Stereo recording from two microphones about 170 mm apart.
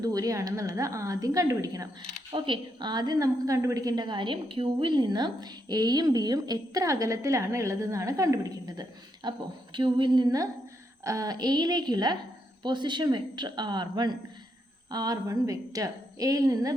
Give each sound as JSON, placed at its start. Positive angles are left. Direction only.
{"t": 0.0, "sound": "a woman's voice", "side_deg": -20}